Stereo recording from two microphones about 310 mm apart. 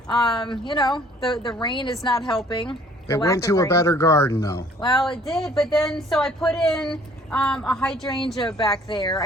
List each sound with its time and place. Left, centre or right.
0.3 s speech: centre
5.3 s speech: centre
8.4 s speech: centre